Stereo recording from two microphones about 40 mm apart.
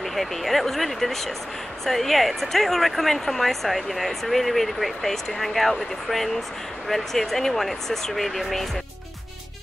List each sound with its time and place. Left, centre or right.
0.0 s speech: centre